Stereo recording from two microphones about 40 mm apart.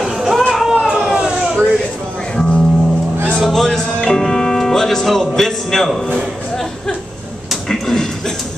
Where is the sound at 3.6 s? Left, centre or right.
Centre.